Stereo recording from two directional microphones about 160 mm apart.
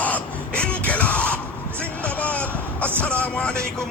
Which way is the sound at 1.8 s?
10° left (ahead or behind).